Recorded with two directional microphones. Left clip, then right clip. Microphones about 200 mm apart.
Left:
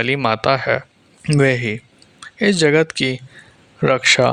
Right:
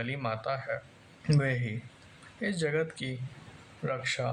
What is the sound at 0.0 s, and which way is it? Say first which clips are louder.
Speech: left 17 dB; 50° left (ahead or behind).